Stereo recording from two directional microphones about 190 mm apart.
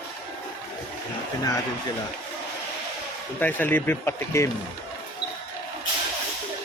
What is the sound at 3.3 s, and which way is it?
Speech, 10° left (ahead or behind).